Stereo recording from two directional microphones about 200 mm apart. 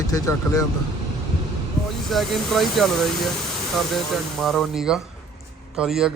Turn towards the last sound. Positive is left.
turn(degrees=-5)  # may be behind; listen again after turning